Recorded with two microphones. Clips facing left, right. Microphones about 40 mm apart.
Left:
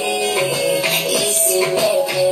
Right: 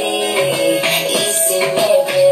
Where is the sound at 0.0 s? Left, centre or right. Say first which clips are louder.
Right 2 dB; right.